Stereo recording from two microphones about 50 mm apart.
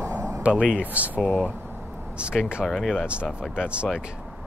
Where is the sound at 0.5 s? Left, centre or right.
Centre.